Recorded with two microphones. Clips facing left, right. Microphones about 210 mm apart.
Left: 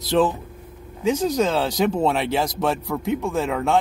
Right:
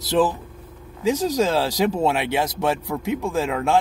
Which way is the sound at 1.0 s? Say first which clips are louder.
Even; 10° right (ahead or behind).